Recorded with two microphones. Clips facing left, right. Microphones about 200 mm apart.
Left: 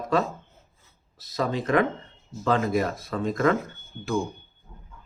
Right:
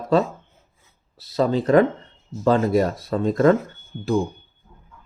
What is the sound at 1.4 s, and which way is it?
Speech, 35° right (ahead or behind).